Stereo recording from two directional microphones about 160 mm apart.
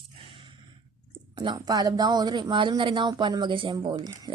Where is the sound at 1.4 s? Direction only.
25° right (ahead or behind).